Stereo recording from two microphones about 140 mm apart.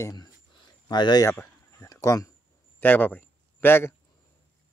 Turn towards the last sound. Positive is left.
turn(degrees=15)  # may be behind; listen again after turning